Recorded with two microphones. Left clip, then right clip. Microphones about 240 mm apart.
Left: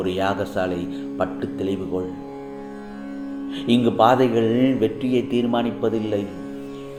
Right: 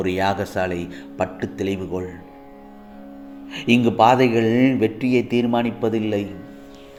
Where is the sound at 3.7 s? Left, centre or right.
Right.